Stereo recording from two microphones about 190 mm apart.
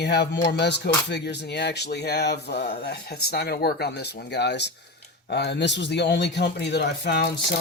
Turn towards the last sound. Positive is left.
turn(degrees=60)  # may be behind; listen again after turning